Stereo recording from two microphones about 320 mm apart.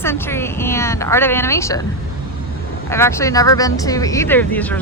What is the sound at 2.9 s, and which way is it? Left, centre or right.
Speech, centre.